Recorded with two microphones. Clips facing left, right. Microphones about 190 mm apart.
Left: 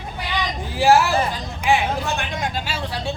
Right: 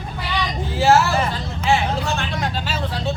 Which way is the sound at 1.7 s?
15° left (ahead or behind).